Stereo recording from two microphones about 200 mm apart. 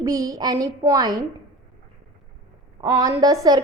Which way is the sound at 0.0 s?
15° right (ahead or behind).